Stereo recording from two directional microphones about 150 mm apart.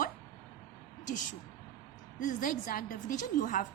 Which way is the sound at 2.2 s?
60° left (ahead or behind).